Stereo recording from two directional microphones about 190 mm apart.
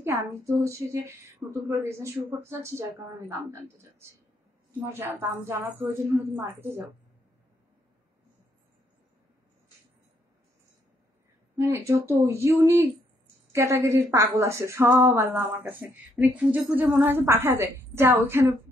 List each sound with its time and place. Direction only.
0.0 s speech: 15° right (ahead or behind)
11.5 s speech: 15° right (ahead or behind)